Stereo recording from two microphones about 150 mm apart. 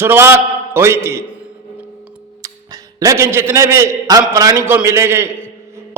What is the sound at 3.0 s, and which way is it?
A man's voice, 20° right (ahead or behind).